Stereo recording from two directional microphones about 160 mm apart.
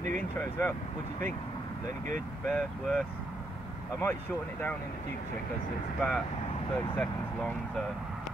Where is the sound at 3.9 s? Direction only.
15° left (ahead or behind).